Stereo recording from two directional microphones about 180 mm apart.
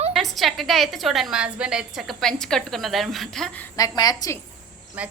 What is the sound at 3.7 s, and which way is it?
Speech, 20° left (ahead or behind).